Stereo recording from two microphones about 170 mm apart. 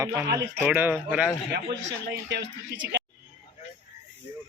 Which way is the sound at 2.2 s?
90° right.